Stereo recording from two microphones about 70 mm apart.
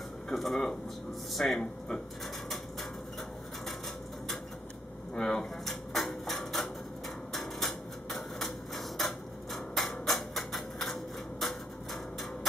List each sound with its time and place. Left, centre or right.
0.3 s speech: centre
5.1 s dishes: centre
7.3 s a sound: centre